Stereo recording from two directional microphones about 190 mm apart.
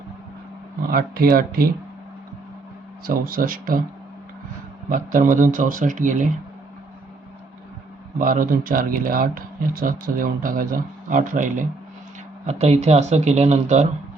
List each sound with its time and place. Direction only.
0.8 s speech: 50° right (ahead or behind)
3.1 s speech: 50° right (ahead or behind)
4.9 s speech: 45° right (ahead or behind)
8.2 s speech: 45° right (ahead or behind)